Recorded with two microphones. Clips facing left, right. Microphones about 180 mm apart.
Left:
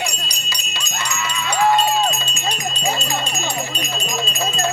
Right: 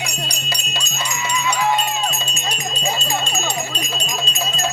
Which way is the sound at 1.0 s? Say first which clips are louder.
Right 2 dB; 60° left (ahead or behind).